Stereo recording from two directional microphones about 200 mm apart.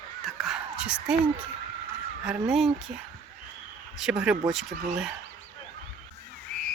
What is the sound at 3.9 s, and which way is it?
Speech, 5° right (ahead or behind).